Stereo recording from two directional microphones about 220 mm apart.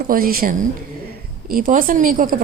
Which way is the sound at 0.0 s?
40° right (ahead or behind).